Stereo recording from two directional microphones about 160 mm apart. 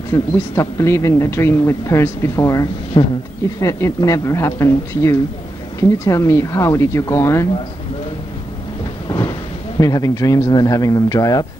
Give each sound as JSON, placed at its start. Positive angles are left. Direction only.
{"t": 0.1, "sound": "speech", "side_deg": 20}
{"t": 2.9, "sound": "speech", "side_deg": 30}
{"t": 3.6, "sound": "speech", "side_deg": 20}
{"t": 9.8, "sound": "speech", "side_deg": 25}